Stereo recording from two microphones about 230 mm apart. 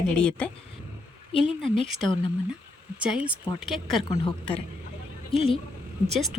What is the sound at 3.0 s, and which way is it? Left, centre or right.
Speech, centre.